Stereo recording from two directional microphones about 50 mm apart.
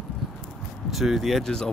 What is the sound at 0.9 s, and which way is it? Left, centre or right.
Speech, centre.